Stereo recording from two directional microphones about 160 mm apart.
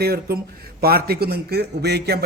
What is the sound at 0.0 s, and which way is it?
A man's voice, 75° right (ahead or behind).